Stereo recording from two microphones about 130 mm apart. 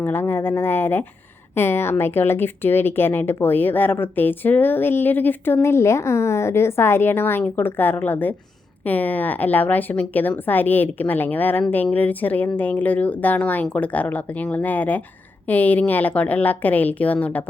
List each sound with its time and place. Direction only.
0.0 s speech: 15° left (ahead or behind)